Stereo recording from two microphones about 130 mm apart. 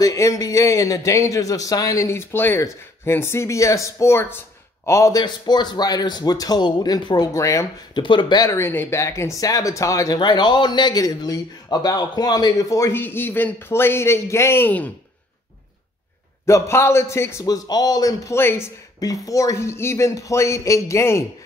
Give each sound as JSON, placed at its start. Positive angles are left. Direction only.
{"t": 0.0, "sound": "a man's voice", "side_deg": 25}
{"t": 8.0, "sound": "a man's voice", "side_deg": 40}
{"t": 8.5, "sound": "speech", "side_deg": 20}
{"t": 16.4, "sound": "speech", "side_deg": 20}